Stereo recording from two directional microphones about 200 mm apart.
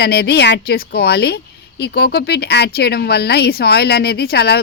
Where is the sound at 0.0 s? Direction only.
55° left (ahead or behind).